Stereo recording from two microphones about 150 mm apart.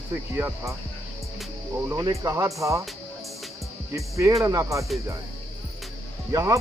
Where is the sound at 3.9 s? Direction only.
20° right (ahead or behind).